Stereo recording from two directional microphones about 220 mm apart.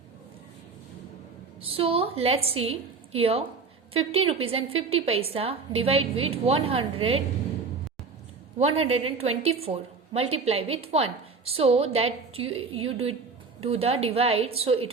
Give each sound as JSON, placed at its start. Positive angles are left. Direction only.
{"t": 1.6, "sound": "a woman's voice", "side_deg": -25}
{"t": 8.5, "sound": "a woman's voice", "side_deg": -30}